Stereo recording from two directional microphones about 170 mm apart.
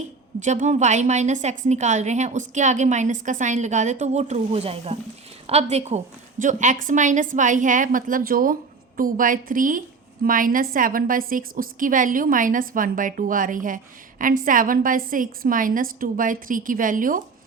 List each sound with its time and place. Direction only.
0.3 s a woman's voice: 45° right (ahead or behind)